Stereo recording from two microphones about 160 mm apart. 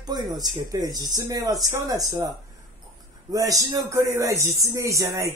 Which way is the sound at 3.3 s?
20° right (ahead or behind).